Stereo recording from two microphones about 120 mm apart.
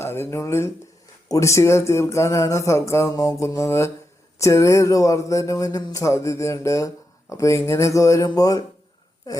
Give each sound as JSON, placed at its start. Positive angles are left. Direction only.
{"t": 0.0, "sound": "speech", "side_deg": 20}